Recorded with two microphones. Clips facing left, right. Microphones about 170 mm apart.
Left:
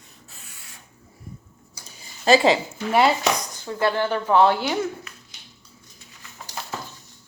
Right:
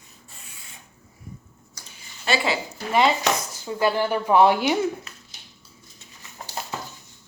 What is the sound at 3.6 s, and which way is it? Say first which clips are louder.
Speech: even; 10° right (ahead or behind).